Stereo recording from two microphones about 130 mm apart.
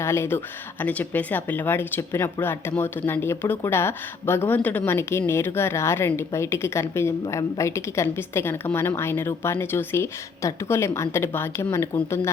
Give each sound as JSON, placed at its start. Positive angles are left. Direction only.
{"t": 0.0, "sound": "speech", "side_deg": 20}